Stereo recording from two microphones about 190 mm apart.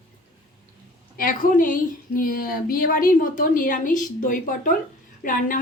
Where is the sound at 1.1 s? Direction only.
45° left (ahead or behind).